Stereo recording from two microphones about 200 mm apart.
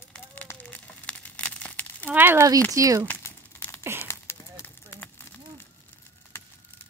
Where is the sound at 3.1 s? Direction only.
10° left (ahead or behind).